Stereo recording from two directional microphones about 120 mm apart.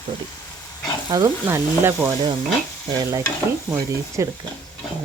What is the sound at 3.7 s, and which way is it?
Speech, 25° right (ahead or behind).